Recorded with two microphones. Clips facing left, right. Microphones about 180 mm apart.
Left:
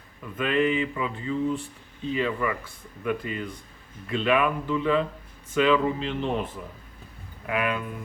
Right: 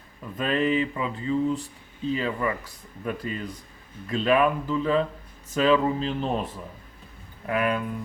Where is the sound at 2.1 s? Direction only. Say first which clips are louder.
Left 1 dB; 35° right (ahead or behind).